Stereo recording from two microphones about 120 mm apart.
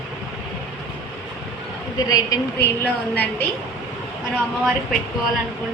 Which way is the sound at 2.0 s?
30° left (ahead or behind).